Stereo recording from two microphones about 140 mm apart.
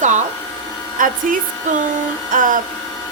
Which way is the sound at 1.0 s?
75° right (ahead or behind).